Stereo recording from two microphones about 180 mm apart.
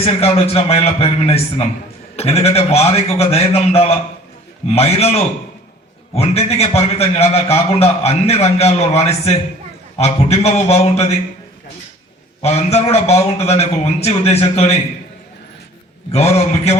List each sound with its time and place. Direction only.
0.0 s a man's voice: 35° left (ahead or behind)
12.4 s a man's voice: 35° left (ahead or behind)
16.1 s a man's voice: 35° left (ahead or behind)